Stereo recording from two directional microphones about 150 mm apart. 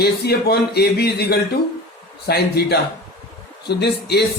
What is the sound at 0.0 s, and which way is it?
Speech, 90° left.